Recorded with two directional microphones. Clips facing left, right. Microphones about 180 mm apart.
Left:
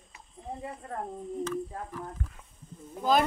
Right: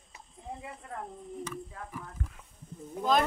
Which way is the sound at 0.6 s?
40° left (ahead or behind).